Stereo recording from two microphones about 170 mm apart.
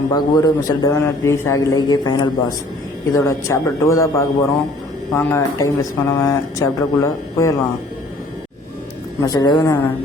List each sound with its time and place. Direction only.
0.1 s a man's voice: 20° left (ahead or behind)
9.2 s a man's voice: 20° left (ahead or behind)